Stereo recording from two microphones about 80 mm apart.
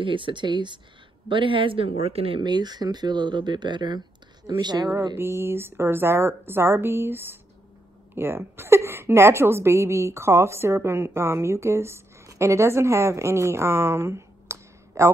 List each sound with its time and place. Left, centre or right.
0.0 s speech: right
1.3 s speech: right
2.3 s speech: right
5.1 s a woman's voice: right